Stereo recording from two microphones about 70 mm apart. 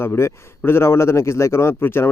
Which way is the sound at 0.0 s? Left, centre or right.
Left.